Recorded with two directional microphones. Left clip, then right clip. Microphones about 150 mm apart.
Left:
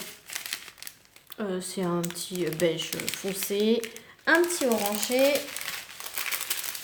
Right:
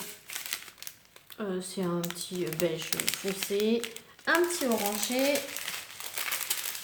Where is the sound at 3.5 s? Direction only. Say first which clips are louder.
Left 4 dB; 45° left (ahead or behind).